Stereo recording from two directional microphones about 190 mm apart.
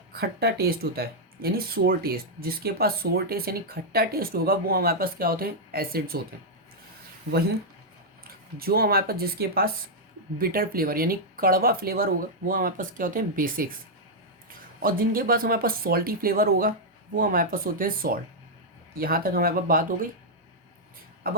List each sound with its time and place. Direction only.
0.1 s speech: 55° right (ahead or behind)
8.2 s speech: 50° right (ahead or behind)
14.8 s speech: 50° right (ahead or behind)
21.2 s speech: 50° right (ahead or behind)